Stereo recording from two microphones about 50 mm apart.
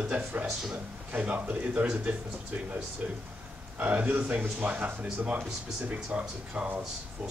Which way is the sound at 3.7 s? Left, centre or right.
Right.